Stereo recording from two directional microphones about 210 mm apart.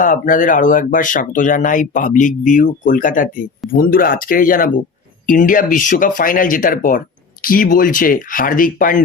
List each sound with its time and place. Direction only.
0.0 s speech: 40° left (ahead or behind)